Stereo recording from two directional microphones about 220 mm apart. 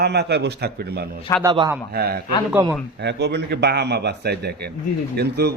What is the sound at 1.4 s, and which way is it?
Speech, 20° right (ahead or behind).